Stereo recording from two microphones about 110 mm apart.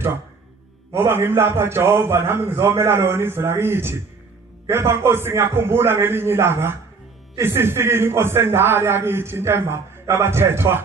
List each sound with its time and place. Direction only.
0.9 s a man's voice: 20° right (ahead or behind)